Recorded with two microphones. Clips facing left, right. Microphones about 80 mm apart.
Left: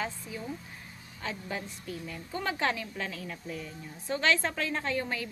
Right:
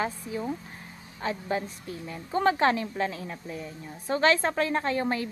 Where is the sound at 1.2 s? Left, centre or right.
Right.